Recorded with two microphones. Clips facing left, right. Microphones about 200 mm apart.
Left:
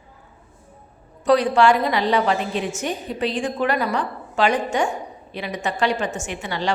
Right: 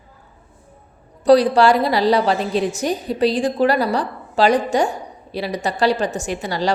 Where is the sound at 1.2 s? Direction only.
35° right (ahead or behind).